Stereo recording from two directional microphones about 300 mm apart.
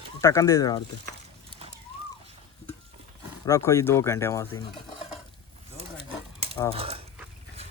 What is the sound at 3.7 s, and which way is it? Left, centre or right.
Speech, centre.